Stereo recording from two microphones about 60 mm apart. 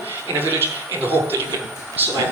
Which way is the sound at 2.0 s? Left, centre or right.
Right.